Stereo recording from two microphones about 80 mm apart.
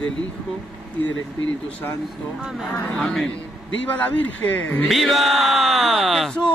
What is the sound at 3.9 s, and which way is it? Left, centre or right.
A man's voice, left.